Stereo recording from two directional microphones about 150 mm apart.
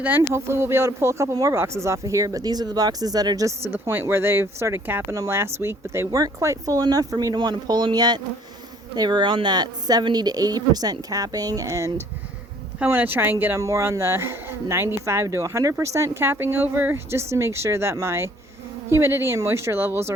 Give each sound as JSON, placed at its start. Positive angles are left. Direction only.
{"t": 0.0, "sound": "speech", "side_deg": -15}